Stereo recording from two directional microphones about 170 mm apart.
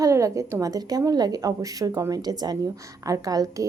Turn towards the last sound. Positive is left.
turn(degrees=-20)  # may be behind; listen again after turning